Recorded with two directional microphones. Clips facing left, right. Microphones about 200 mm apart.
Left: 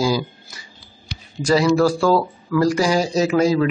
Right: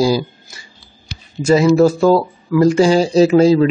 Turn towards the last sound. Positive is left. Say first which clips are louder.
# right 7 dB
turn(degrees=-30)  # may be behind; listen again after turning